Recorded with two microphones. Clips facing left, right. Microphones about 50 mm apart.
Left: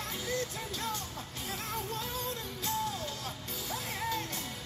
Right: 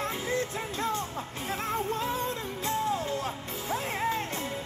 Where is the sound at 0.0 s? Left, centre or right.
Right.